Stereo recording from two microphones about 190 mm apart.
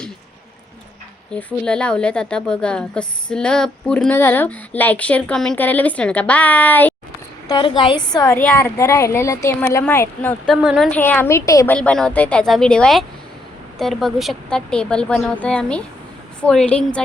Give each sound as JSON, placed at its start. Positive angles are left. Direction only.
{"t": 1.3, "sound": "a woman's voice", "side_deg": 5}
{"t": 7.4, "sound": "a woman's voice", "side_deg": 25}
{"t": 10.4, "sound": "a woman's voice", "side_deg": 0}